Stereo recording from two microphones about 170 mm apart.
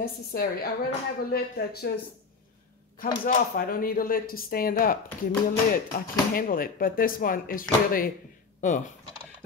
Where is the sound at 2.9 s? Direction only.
55° left (ahead or behind).